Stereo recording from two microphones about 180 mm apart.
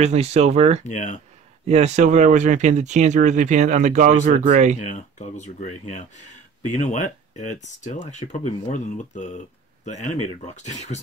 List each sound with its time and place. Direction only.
0.0 s speech: 35° right (ahead or behind)
0.8 s speech: 40° left (ahead or behind)
1.7 s speech: 40° right (ahead or behind)
4.7 s speech: 40° left (ahead or behind)